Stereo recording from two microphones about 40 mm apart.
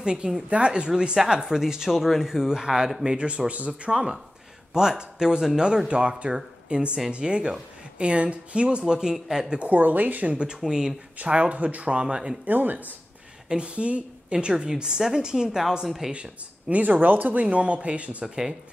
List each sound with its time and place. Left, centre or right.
0.0 s a woman's voice: right
3.1 s speech: right
4.7 s a woman's voice: centre
9.6 s speech: right
10.3 s a woman's voice: right
11.1 s a woman's voice: right
12.4 s speech: right
13.5 s a woman's voice: right; by 16.1 s centre
16.1 s speech: right
16.8 s a woman's voice: right
18.2 s speech: centre